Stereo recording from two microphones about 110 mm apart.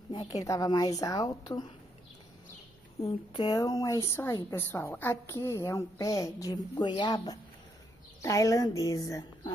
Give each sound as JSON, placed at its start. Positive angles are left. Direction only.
{"t": 0.4, "sound": "a woman's voice", "side_deg": 35}
{"t": 3.1, "sound": "a woman's voice", "side_deg": 45}